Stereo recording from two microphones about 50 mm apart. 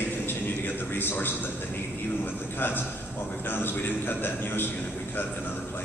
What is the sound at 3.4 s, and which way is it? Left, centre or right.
A man's voice, left.